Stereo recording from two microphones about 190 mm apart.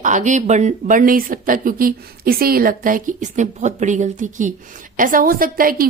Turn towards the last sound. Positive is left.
turn(degrees=-50)  # may be behind; listen again after turning